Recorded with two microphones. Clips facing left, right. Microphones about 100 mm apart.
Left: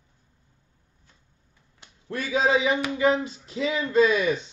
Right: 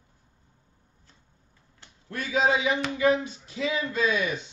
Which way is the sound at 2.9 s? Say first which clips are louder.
Left 1 dB; 30° left (ahead or behind).